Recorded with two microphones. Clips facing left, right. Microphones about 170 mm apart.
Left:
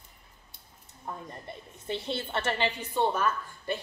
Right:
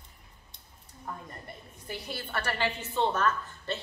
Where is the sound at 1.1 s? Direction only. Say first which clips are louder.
Left 2 dB; 25° left (ahead or behind).